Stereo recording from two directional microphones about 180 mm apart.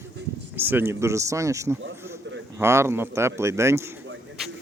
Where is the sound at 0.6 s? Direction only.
10° right (ahead or behind).